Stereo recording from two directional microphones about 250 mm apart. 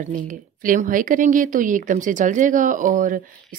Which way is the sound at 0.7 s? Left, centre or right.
Right.